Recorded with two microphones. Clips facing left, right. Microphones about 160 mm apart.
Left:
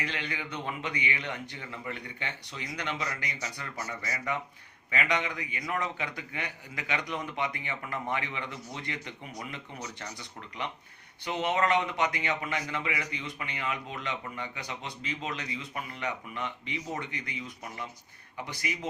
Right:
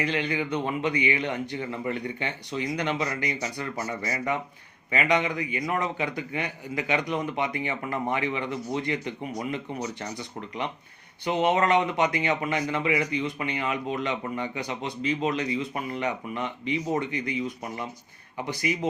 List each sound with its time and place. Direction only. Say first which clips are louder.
0.0 s speech: right 9 dB; 20° right (ahead or behind)
11.3 s speech: right 5 dB; 20° right (ahead or behind)
18.7 s speech: right 9 dB; 20° right (ahead or behind)